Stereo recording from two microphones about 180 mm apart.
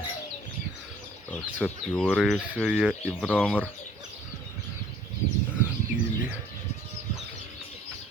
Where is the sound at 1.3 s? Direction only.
5° left (ahead or behind).